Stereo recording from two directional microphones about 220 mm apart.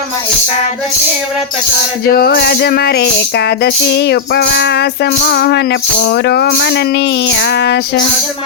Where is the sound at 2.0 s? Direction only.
45° left (ahead or behind).